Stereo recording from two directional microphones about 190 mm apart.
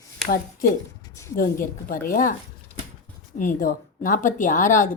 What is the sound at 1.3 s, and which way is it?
Speech, 50° left (ahead or behind).